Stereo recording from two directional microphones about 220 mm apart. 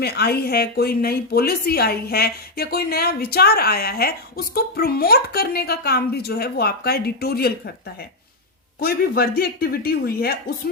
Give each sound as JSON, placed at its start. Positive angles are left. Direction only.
{"t": 0.0, "sound": "a woman's voice", "side_deg": 45}
{"t": 8.8, "sound": "a woman's voice", "side_deg": 45}